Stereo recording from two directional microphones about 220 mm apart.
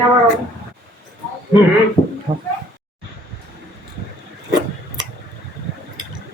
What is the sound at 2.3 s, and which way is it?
Speech, 20° right (ahead or behind).